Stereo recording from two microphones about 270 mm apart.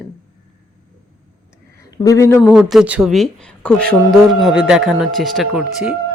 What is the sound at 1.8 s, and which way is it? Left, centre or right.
Speech, centre.